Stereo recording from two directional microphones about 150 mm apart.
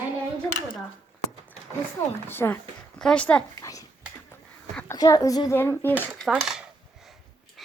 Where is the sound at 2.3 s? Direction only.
15° left (ahead or behind).